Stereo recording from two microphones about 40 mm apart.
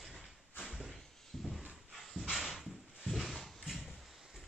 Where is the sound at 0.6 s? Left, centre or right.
Centre.